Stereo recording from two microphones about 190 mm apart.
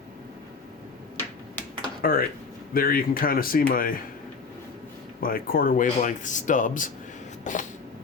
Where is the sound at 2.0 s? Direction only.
50° left (ahead or behind).